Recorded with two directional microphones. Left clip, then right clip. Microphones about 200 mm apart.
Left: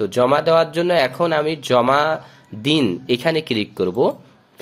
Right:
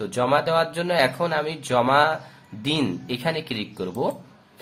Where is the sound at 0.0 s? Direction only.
35° left (ahead or behind).